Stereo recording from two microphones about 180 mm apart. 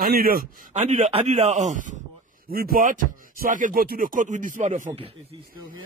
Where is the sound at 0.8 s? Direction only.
35° right (ahead or behind).